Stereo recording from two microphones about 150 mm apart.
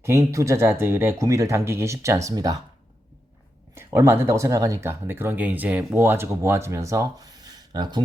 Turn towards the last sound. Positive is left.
turn(degrees=-30)  # may be behind; listen again after turning